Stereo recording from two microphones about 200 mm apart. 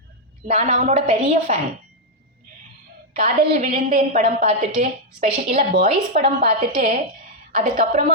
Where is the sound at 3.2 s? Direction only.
40° right (ahead or behind).